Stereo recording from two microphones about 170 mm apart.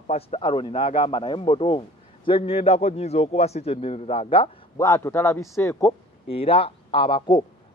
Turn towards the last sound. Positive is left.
turn(degrees=30)  # may be behind; listen again after turning